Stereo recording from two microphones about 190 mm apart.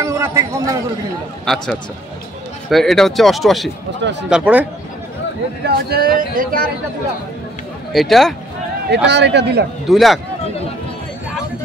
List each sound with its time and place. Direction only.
0.0 s a man's voice: 15° right (ahead or behind)
1.4 s speech: centre (ahead or behind)
4.0 s a man's voice: 65° right (ahead or behind)
4.3 s speech: 10° right (ahead or behind)
5.7 s speech: 55° right (ahead or behind)
7.9 s speech: centre (ahead or behind)
8.9 s a man's voice: 65° right (ahead or behind)
9.8 s speech: centre (ahead or behind)